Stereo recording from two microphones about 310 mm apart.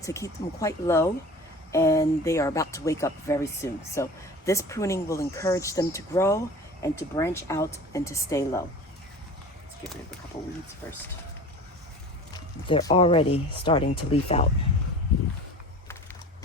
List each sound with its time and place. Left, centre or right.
0.0 s speech: centre
12.6 s speech: centre